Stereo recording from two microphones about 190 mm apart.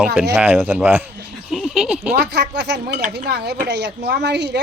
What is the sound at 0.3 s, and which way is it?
Speech, 10° right (ahead or behind).